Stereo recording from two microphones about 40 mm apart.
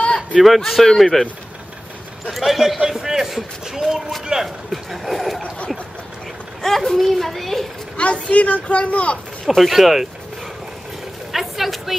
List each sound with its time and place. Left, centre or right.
0.0 s a sound: left
0.4 s a man's voice: centre
2.3 s a man's voice: centre; by 4.5 s right
4.9 s a man's voice: centre
6.6 s a man's voice: centre
8.0 s a woman's voice: left
9.6 s a man's voice: centre
11.3 s a sound: centre